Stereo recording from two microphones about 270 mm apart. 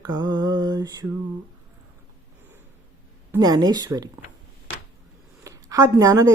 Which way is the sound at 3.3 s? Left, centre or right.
Centre.